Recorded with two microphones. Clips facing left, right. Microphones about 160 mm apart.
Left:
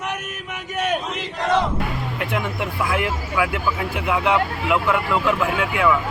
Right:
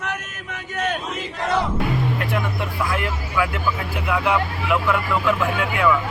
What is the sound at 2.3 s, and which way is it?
Speech, 15° left (ahead or behind).